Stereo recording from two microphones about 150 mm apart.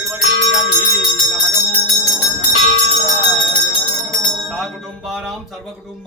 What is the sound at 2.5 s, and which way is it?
Bell, 40° right (ahead or behind).